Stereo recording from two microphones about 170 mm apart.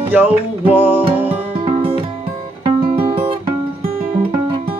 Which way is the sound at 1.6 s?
30° right (ahead or behind).